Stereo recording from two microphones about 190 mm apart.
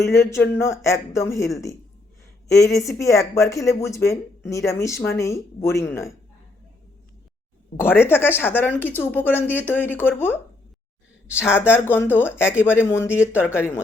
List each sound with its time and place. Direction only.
0.0 s speech: 15° left (ahead or behind)
7.8 s speech: 10° left (ahead or behind)
11.7 s speech: 10° left (ahead or behind)